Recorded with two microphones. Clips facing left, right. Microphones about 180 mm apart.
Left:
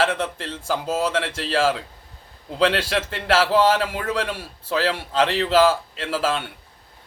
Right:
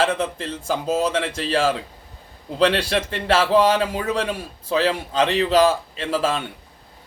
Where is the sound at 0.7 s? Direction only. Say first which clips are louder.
Right 1 dB; 15° right (ahead or behind).